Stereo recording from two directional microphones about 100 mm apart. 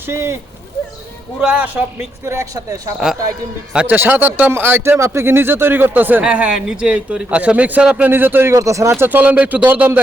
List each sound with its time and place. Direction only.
0.0 s speech: 25° right (ahead or behind)
1.4 s speech: 10° right (ahead or behind)
2.2 s speech: 30° right (ahead or behind)
3.8 s speech: 20° right (ahead or behind)
9.0 s speech: 15° right (ahead or behind)